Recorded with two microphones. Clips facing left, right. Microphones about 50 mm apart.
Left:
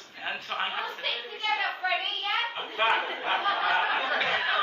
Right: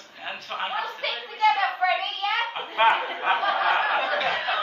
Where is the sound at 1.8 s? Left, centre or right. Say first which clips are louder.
Right 7 dB; right.